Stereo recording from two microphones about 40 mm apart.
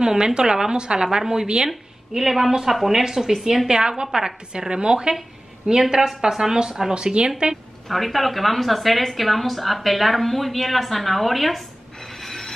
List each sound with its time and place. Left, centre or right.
0.0 s speech: centre
1.7 s a woman's voice: centre
6.9 s a woman's voice: right
7.9 s a woman's voice: centre
12.2 s a sound: centre